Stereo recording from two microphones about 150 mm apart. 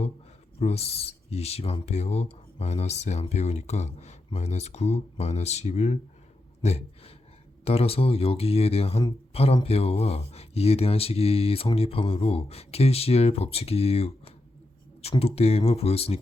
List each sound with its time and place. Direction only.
0.6 s speech: 45° left (ahead or behind)